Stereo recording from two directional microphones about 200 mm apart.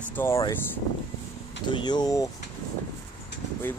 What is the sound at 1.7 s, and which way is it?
Speech, 20° left (ahead or behind).